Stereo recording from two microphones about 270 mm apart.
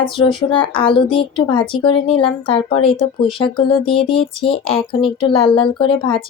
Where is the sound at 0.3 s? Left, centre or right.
Centre.